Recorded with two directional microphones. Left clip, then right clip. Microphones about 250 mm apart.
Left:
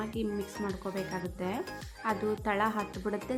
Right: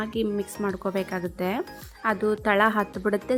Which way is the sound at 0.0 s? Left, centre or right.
Right.